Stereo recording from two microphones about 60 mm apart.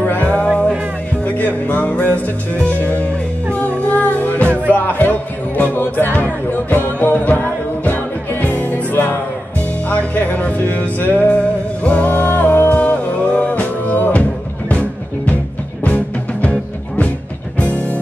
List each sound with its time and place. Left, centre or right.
0.0 s music: left
0.5 s music: centre
5.6 s music: left